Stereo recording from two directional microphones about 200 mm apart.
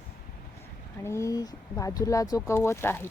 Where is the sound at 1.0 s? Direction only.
15° left (ahead or behind).